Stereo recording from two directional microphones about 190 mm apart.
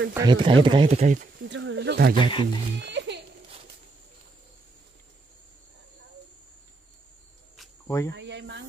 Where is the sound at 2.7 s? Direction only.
65° right (ahead or behind).